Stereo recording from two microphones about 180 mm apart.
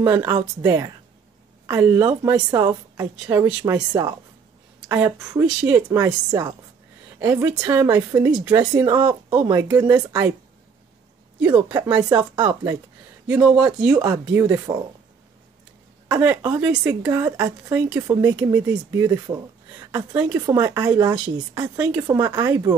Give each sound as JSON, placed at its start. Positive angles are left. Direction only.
{"t": 0.0, "sound": "speech", "side_deg": -15}
{"t": 0.4, "sound": "a woman's voice", "side_deg": -25}
{"t": 1.8, "sound": "speech", "side_deg": -10}
{"t": 2.0, "sound": "a woman's voice", "side_deg": -20}
{"t": 3.4, "sound": "speech", "side_deg": -10}
{"t": 3.9, "sound": "a woman's voice", "side_deg": -25}
{"t": 4.8, "sound": "speech", "side_deg": -10}
{"t": 6.0, "sound": "a woman's voice", "side_deg": -20}
{"t": 11.5, "sound": "a woman's voice", "side_deg": -25}
{"t": 13.3, "sound": "a man's voice", "side_deg": -5}
{"t": 13.7, "sound": "a woman's voice", "side_deg": -20}
{"t": 16.2, "sound": "a woman's voice", "side_deg": -15}